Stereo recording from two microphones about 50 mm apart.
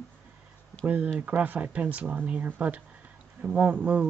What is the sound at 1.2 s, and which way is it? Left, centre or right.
Speech, right.